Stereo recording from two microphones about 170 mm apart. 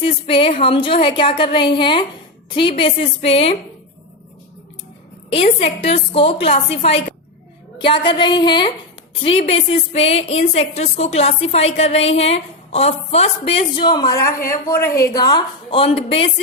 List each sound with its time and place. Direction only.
0.0 s a woman's voice: 30° left (ahead or behind)
5.5 s a woman's voice: 35° left (ahead or behind)